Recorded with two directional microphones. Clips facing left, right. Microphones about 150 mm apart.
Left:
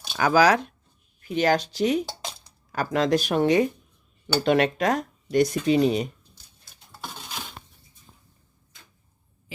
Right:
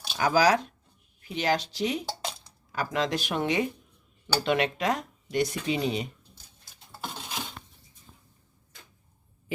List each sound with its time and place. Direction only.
0.2 s speech: 65° left (ahead or behind)
1.3 s speech: 50° left (ahead or behind)
6.9 s a sound: centre (ahead or behind)